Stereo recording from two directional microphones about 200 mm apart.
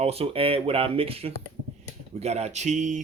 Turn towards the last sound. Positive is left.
turn(degrees=-40)  # may be behind; listen again after turning